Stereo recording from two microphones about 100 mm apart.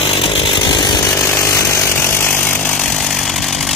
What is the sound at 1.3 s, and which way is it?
Chainsaw, 30° left (ahead or behind).